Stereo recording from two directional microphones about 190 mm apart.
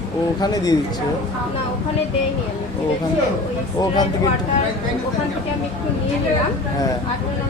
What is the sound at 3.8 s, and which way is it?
Speech, 20° left (ahead or behind).